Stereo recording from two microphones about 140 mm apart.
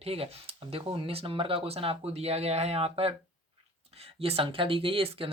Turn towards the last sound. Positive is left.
turn(degrees=-40)  # may be behind; listen again after turning